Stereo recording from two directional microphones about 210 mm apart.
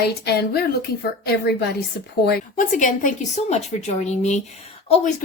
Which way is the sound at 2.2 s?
35° left (ahead or behind).